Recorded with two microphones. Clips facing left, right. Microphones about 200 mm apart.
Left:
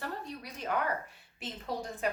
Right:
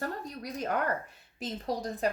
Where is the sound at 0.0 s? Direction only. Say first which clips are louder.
Right 4 dB; 40° right (ahead or behind).